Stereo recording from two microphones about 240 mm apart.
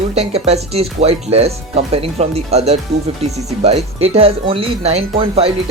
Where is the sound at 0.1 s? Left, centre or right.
Right.